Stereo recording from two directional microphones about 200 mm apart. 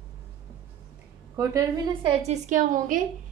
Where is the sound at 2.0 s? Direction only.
35° right (ahead or behind).